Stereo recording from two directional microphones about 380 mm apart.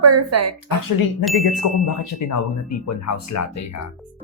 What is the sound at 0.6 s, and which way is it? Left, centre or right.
A man's voice, left.